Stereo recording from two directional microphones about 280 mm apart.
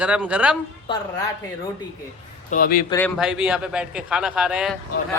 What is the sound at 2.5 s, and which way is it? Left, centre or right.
Speech, left.